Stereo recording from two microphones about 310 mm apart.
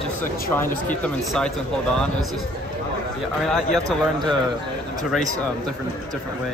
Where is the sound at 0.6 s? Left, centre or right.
Centre.